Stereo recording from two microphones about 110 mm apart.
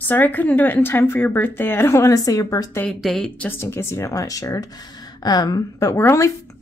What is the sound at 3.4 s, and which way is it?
A woman's voice, 20° left (ahead or behind).